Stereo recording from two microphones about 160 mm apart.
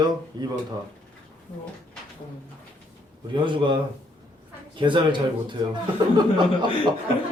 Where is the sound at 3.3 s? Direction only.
30° right (ahead or behind).